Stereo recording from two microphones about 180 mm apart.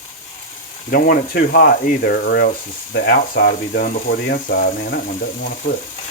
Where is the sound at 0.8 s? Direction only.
50° left (ahead or behind).